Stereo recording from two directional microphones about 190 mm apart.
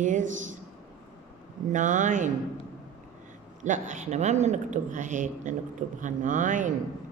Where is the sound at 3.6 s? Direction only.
40° right (ahead or behind).